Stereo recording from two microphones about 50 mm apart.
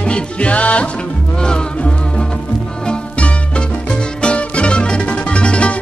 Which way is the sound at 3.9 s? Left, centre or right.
Left.